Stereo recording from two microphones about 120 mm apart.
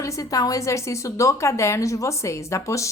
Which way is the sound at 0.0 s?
25° left (ahead or behind).